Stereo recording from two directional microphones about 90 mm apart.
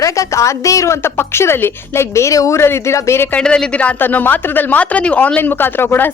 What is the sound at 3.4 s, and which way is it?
A woman's voice, 10° left (ahead or behind).